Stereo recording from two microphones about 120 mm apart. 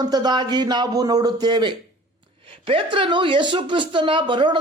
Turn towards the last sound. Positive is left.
turn(degrees=-40)  # may be behind; listen again after turning